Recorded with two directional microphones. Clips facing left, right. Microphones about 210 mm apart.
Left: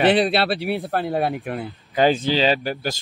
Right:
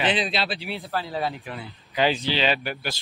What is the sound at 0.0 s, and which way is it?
Speech, 60° left (ahead or behind).